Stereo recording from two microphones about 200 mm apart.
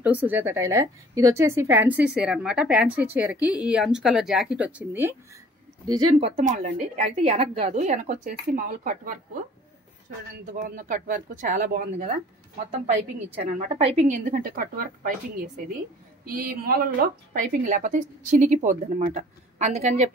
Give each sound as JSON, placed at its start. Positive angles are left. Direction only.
{"t": 0.0, "sound": "a woman's voice", "side_deg": -10}
{"t": 5.9, "sound": "a woman's voice", "side_deg": -30}
{"t": 10.4, "sound": "a woman's voice", "side_deg": -45}
{"t": 16.3, "sound": "a woman's voice", "side_deg": -45}